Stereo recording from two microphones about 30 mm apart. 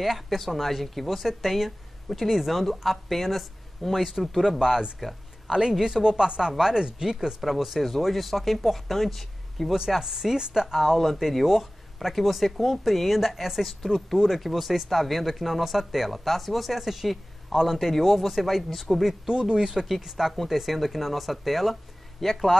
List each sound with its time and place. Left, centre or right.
0.0 s speech: centre
4.4 s speech: centre
6.0 s speech: right; by 9.7 s centre
9.8 s speech: centre
19.2 s speech: right
20.4 s speech: centre